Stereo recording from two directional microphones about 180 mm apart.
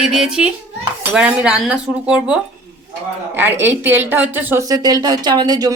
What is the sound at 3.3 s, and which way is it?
Speech, 10° right (ahead or behind).